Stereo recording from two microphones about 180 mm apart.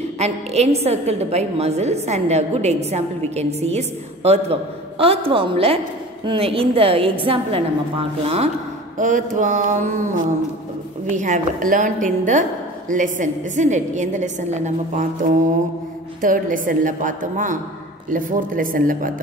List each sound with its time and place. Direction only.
0.2 s a woman's voice: 35° right (ahead or behind)
8.9 s a woman's voice: 45° right (ahead or behind)